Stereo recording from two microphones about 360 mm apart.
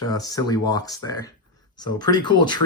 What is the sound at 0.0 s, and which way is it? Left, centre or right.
Speech, centre.